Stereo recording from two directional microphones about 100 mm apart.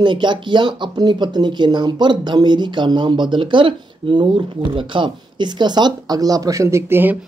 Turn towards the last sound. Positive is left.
turn(degrees=-20)  # may be behind; listen again after turning